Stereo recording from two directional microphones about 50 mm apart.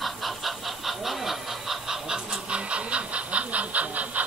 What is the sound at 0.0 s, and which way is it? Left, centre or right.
Chicken, centre.